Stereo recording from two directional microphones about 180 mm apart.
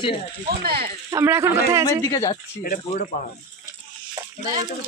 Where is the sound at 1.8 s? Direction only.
20° left (ahead or behind).